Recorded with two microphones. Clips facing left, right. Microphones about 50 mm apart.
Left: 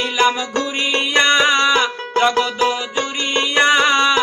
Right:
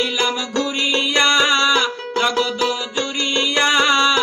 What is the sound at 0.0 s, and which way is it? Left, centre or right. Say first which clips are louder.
Music: left 3 dB; left.